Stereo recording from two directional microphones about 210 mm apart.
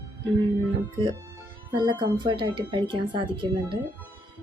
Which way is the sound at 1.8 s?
20° right (ahead or behind).